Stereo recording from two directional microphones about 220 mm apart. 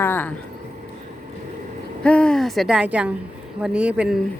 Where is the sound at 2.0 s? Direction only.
5° left (ahead or behind).